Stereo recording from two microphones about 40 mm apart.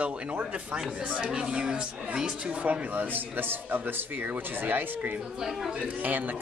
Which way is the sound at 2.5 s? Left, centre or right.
Right.